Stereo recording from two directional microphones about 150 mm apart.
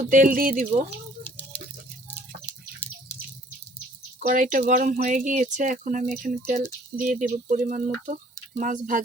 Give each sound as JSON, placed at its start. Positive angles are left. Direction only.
{"t": 0.0, "sound": "speech", "side_deg": -60}
{"t": 4.2, "sound": "speech", "side_deg": -60}